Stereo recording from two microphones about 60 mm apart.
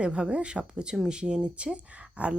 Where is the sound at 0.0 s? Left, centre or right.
Centre.